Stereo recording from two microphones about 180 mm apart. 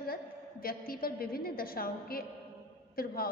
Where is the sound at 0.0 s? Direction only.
55° left (ahead or behind).